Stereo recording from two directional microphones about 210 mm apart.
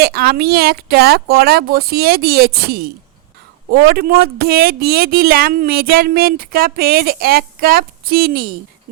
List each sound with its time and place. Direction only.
0.0 s speech: 45° right (ahead or behind)